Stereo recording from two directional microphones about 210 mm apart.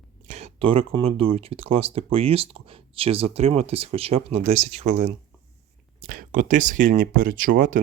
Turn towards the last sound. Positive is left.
turn(degrees=-40)  # may be behind; listen again after turning